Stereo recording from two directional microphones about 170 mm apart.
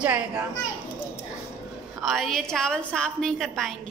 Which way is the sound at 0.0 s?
10° right (ahead or behind).